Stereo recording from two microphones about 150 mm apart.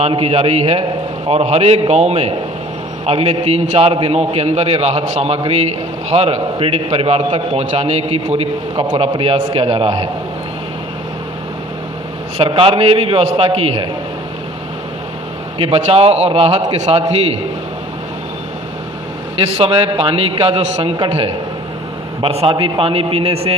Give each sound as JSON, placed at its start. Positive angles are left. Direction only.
{"t": 0.0, "sound": "a man's voice", "side_deg": -45}
{"t": 12.4, "sound": "a man's voice", "side_deg": -35}
{"t": 15.5, "sound": "a man's voice", "side_deg": -40}
{"t": 19.4, "sound": "a man's voice", "side_deg": -40}